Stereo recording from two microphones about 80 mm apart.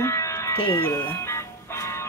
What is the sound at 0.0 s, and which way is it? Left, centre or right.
Music, left.